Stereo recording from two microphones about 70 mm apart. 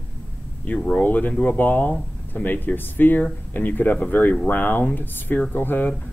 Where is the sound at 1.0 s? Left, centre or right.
Left.